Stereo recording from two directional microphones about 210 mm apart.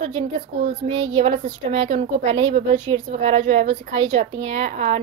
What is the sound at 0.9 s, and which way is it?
A woman's voice, 25° right (ahead or behind).